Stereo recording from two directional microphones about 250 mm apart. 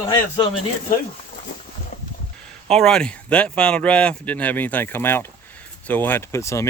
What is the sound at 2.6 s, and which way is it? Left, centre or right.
Speech, centre.